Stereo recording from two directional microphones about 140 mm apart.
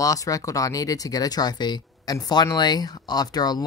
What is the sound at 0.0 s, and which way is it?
Speech, 25° left (ahead or behind).